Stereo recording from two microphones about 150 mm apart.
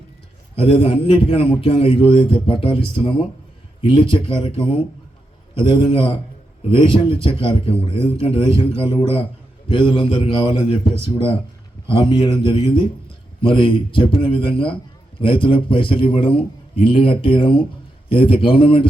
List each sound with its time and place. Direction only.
0.6 s a man's voice: 35° left (ahead or behind)
11.9 s a man's voice: 30° left (ahead or behind)